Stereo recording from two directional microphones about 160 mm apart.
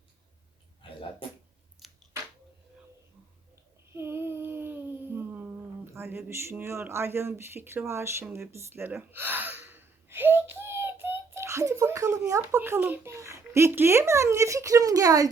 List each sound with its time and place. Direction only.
1.8 s squish: centre (ahead or behind)
3.9 s a sound: 15° right (ahead or behind)
12.5 s a child's voice: 10° right (ahead or behind)